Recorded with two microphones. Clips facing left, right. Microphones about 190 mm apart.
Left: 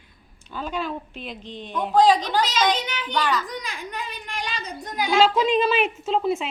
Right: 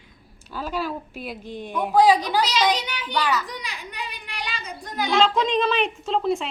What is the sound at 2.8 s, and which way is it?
Speech, 45° left (ahead or behind).